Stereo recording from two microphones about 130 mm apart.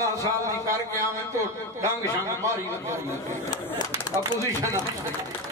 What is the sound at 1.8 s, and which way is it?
Speech, 25° right (ahead or behind).